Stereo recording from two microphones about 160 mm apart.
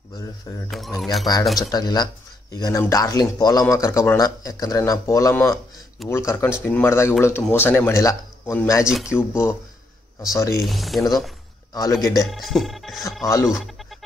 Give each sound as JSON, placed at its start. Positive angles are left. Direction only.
{"t": 0.1, "sound": "speech", "side_deg": 20}
{"t": 0.7, "sound": "speech", "side_deg": 0}
{"t": 1.7, "sound": "speech", "side_deg": 25}
{"t": 8.8, "sound": "speech", "side_deg": -5}
{"t": 9.1, "sound": "speech", "side_deg": 15}
{"t": 10.6, "sound": "speech", "side_deg": 0}
{"t": 11.7, "sound": "speech", "side_deg": 20}
{"t": 12.3, "sound": "speech", "side_deg": 0}
{"t": 13.5, "sound": "a sound", "side_deg": 0}